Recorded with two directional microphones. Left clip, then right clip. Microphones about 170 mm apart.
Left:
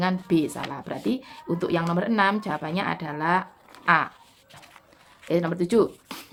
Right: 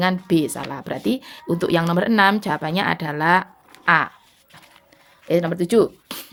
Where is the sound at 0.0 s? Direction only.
45° right (ahead or behind).